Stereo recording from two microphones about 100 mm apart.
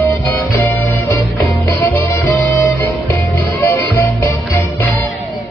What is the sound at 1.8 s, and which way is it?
Music, 25° left (ahead or behind).